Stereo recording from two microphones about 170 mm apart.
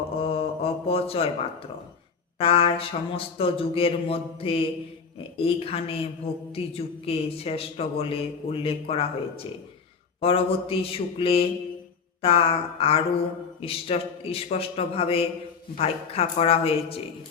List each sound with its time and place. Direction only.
0.2 s mantra: 35° left (ahead or behind)
2.4 s speech: 35° left (ahead or behind)